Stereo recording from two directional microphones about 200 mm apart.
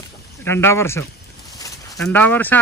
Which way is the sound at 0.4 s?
10° left (ahead or behind).